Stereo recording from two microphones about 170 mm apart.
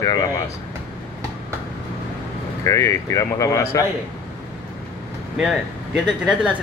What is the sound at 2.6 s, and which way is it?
Speech, 15° left (ahead or behind).